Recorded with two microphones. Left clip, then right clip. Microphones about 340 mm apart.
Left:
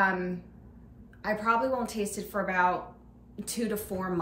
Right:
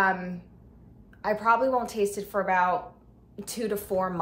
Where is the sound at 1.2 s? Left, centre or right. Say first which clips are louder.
Right 4 dB; centre.